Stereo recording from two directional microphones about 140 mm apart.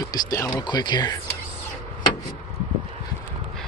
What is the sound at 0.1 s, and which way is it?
Speech, 20° left (ahead or behind).